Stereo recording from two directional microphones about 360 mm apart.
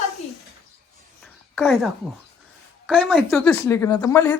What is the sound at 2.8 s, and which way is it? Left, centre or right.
Speech, centre.